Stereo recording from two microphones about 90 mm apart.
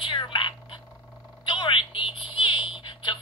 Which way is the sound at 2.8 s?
60° left (ahead or behind).